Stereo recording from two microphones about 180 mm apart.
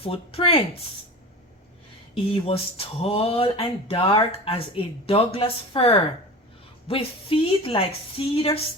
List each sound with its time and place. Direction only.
0.0 s speech: 30° left (ahead or behind)
2.1 s speech: 30° left (ahead or behind)